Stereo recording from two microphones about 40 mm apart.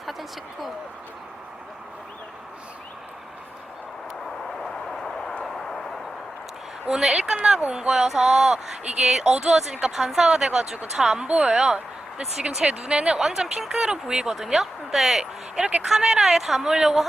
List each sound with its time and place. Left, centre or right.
0.0 s a sound: centre
4.6 s vehicle: centre
6.8 s speech: centre
8.0 s speech: centre
11.3 s speech: right
11.5 s speech: centre
13.1 s speech: centre
15.2 s speech: centre